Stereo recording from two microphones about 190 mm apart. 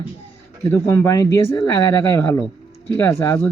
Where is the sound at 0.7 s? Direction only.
15° left (ahead or behind).